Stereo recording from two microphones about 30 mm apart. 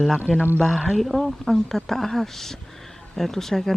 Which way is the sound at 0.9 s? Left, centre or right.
Centre.